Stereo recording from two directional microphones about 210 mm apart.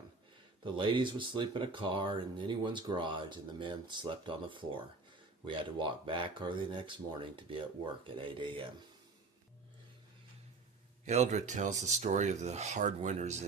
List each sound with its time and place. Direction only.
0.6 s speech: 25° right (ahead or behind)
8.0 s speech: 25° right (ahead or behind)
11.0 s speech: 30° right (ahead or behind)